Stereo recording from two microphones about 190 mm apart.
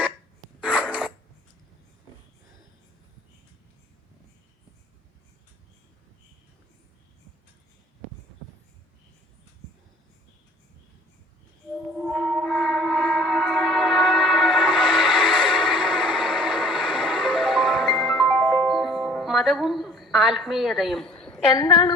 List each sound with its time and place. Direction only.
0.6 s a sound: 5° right (ahead or behind)
11.9 s music: centre (ahead or behind)
21.5 s a woman's voice: 20° left (ahead or behind)